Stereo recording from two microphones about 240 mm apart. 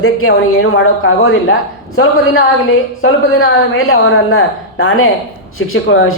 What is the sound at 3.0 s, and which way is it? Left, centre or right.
Speech, left.